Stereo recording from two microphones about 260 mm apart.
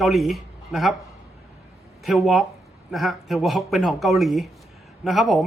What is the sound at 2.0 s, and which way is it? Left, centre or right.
A woman's voice, centre.